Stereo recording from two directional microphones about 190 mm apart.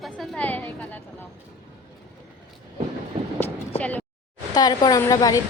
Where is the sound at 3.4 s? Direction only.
10° left (ahead or behind).